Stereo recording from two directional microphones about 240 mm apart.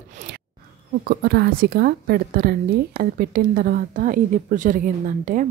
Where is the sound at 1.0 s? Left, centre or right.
Right.